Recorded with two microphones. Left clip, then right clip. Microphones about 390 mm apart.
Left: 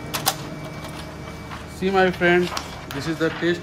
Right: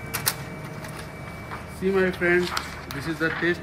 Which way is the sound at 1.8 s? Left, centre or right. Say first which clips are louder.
Left 4 dB; left.